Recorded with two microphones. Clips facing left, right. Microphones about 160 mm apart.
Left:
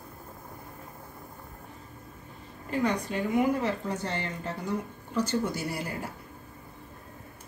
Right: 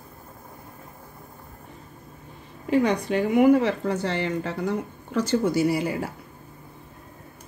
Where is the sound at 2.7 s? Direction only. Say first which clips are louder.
Right 7 dB; 80° right.